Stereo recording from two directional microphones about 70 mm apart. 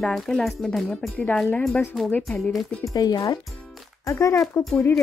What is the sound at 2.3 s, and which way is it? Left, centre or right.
Speech, centre.